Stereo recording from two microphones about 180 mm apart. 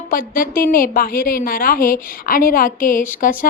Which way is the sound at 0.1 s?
50° left (ahead or behind).